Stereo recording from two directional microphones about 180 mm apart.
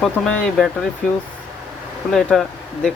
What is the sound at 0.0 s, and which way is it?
Speech, 5° left (ahead or behind).